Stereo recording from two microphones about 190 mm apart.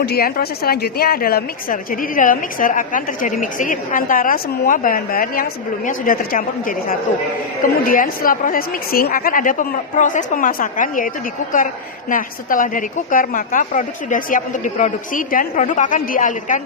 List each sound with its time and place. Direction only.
0.0 s a woman's voice: 55° left (ahead or behind)